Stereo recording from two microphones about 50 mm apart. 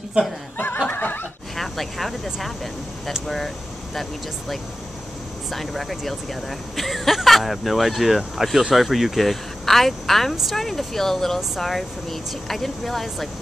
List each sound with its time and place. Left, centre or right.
0.7 s neigh: left
1.6 s speech: centre